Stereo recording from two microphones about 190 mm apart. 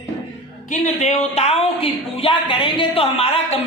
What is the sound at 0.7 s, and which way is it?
Speech, 35° left (ahead or behind).